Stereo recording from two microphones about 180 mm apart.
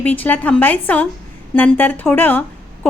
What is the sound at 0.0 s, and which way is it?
A woman's voice, 10° left (ahead or behind).